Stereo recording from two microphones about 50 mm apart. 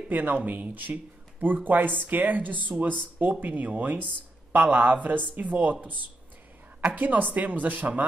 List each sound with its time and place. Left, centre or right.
0.1 s speech: right